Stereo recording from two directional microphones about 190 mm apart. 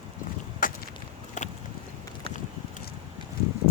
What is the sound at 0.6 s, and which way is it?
Chop, 45° left (ahead or behind).